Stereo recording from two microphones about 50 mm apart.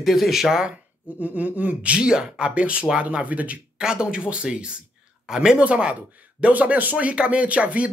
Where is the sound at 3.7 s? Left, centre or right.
Centre.